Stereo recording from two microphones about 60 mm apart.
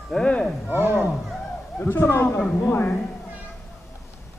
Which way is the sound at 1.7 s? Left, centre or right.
Left.